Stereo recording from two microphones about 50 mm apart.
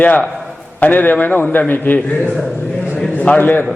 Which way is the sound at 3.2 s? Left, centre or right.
Left.